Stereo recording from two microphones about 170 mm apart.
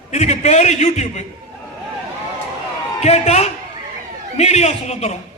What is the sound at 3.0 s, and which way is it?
A man's voice, 40° left (ahead or behind).